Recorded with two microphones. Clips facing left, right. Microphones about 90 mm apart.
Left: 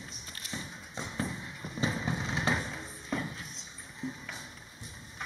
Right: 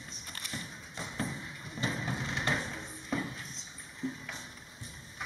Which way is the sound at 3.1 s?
5° right (ahead or behind).